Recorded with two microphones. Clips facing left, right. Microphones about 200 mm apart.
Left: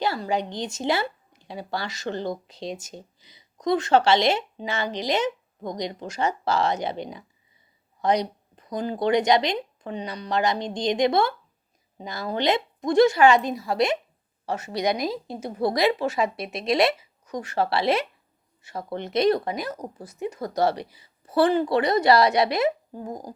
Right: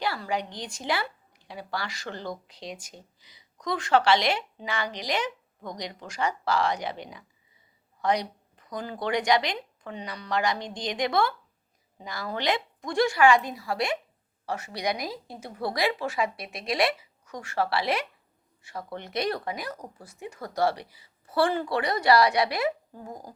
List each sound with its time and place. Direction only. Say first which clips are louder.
0.0 s speech: left 4 dB; 25° left (ahead or behind)